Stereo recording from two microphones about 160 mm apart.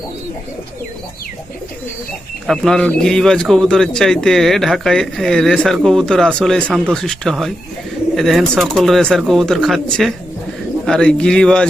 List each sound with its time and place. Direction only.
2.5 s speech: 5° left (ahead or behind)